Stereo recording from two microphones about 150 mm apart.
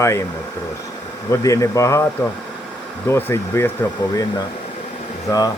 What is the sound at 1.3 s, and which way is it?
Speech, 20° left (ahead or behind).